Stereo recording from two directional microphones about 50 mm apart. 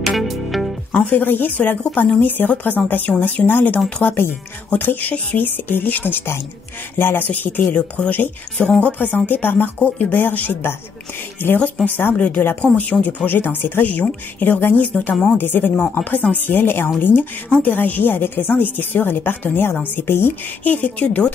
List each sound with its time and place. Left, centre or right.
0.0 s music: centre
0.9 s a woman's voice: left
8.9 s a woman's voice: left
15.3 s speech: left
16.4 s a woman's voice: left
20.6 s speech: left